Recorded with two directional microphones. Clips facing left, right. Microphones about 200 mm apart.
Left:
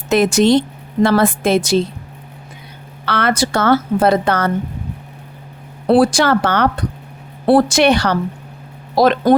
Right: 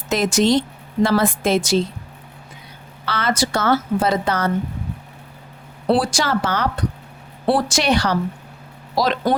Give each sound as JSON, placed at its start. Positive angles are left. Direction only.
{"t": 0.1, "sound": "a woman's voice", "side_deg": 60}
{"t": 3.1, "sound": "a woman's voice", "side_deg": 60}
{"t": 5.9, "sound": "a woman's voice", "side_deg": 60}